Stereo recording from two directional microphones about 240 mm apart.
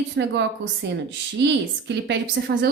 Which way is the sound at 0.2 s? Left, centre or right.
Right.